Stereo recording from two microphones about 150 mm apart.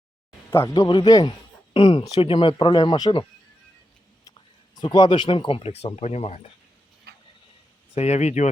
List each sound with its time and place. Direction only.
0.5 s a man's voice: 20° left (ahead or behind)
4.3 s speech: 30° left (ahead or behind); by 6.4 s 45° left (ahead or behind)
7.1 s a sound: 90° right
7.9 s speech: 45° left (ahead or behind)